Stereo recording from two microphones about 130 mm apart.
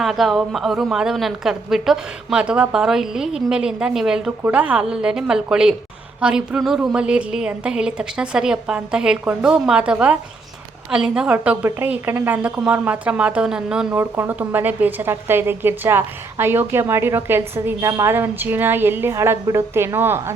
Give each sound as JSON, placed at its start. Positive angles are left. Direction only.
{"t": 0.0, "sound": "a woman's voice", "side_deg": 0}
{"t": 13.9, "sound": "a woman's voice", "side_deg": -15}